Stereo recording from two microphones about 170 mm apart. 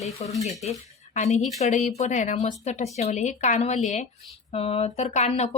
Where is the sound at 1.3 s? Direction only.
45° left (ahead or behind).